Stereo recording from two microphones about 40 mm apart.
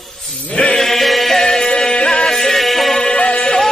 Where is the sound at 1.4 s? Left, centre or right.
Centre.